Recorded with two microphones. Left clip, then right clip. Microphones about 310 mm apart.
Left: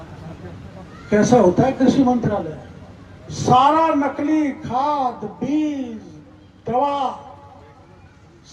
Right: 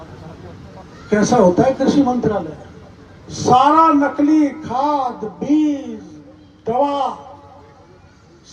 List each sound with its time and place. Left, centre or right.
1.1 s a man's voice: right